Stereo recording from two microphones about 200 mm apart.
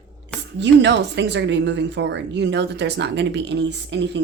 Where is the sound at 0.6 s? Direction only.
60° right (ahead or behind).